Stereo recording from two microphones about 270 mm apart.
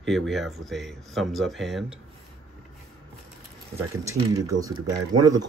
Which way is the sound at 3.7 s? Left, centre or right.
Centre.